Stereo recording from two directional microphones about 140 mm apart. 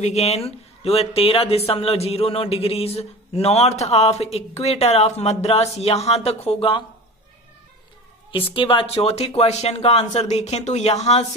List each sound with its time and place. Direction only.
0.0 s speech: 50° left (ahead or behind)
8.5 s speech: 40° left (ahead or behind)